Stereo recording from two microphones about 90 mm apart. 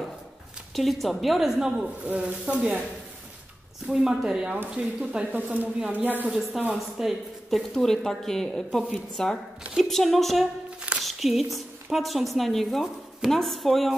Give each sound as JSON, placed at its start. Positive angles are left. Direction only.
{"t": 0.7, "sound": "speech", "side_deg": 0}
{"t": 3.8, "sound": "speech", "side_deg": -5}
{"t": 6.7, "sound": "a woman's voice", "side_deg": -5}